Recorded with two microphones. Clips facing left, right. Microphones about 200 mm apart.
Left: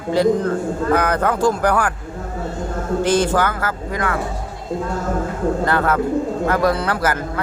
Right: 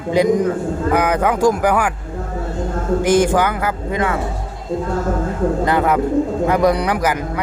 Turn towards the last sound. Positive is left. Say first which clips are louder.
# right 2 dB
turn(degrees=-15)  # may be behind; listen again after turning